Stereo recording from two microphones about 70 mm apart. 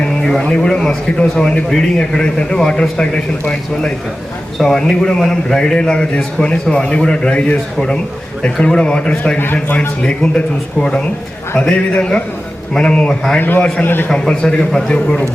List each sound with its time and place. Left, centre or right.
0.0 s a man's voice: centre
8.6 s a man's voice: centre
9.4 s a man's voice: left
10.0 s a man's voice: centre
13.4 s a man's voice: left
14.1 s a man's voice: centre